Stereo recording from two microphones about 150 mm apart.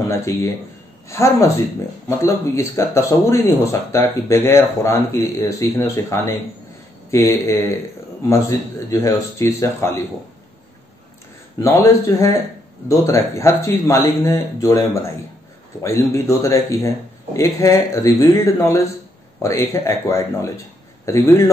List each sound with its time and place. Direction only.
0.1 s speech: 20° left (ahead or behind)
11.6 s speech: 20° left (ahead or behind)